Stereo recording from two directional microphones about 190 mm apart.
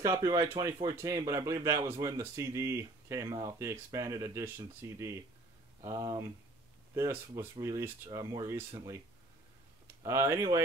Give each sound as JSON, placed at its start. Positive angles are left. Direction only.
{"t": 0.0, "sound": "speech", "side_deg": -15}
{"t": 7.3, "sound": "speech", "side_deg": -20}
{"t": 10.0, "sound": "speech", "side_deg": -15}